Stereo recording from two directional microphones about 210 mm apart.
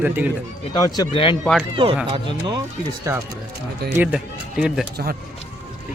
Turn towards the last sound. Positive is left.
turn(degrees=-5)  # may be behind; listen again after turning